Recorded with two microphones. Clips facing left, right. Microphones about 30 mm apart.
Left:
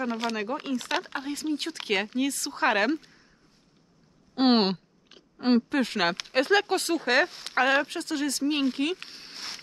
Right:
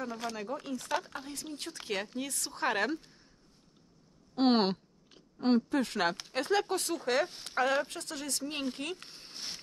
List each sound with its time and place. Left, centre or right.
0.0 s speech: left
2.5 s speech: left
4.4 s speech: left